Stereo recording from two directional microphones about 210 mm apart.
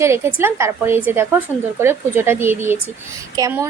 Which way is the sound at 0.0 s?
10° right (ahead or behind).